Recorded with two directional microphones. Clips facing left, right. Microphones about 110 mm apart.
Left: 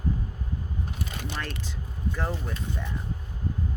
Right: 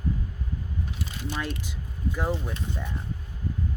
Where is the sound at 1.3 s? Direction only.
15° right (ahead or behind).